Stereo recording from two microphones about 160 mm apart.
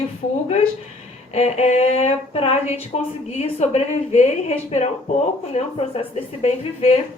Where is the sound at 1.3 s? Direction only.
40° left (ahead or behind).